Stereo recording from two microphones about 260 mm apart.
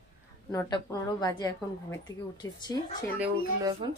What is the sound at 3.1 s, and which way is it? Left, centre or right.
Speech, centre.